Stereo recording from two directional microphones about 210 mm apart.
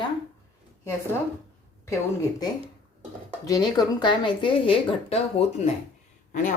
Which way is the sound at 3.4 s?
15° left (ahead or behind).